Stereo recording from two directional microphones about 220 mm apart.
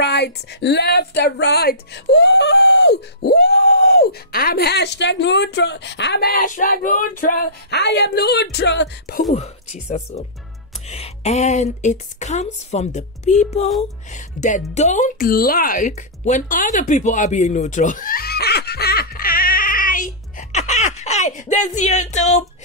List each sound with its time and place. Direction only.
0.0 s a woman's voice: 50° left (ahead or behind)
9.3 s a woman's voice: 30° left (ahead or behind)